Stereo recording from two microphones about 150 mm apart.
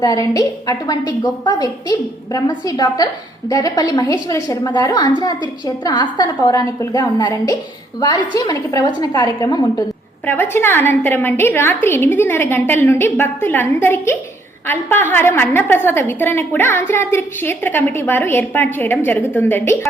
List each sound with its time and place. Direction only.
0.0 s a woman's voice: 25° left (ahead or behind)
10.2 s a woman's voice: 15° left (ahead or behind)